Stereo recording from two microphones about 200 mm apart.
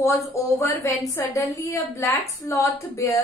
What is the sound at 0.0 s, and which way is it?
A woman's voice, 15° left (ahead or behind).